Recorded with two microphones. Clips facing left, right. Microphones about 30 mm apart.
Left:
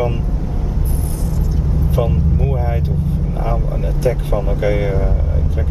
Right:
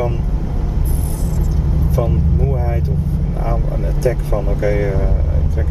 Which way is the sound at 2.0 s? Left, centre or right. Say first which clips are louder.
Even; left.